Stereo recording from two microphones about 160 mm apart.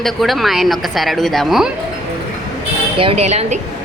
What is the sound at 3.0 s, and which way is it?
Speech, 40° right (ahead or behind).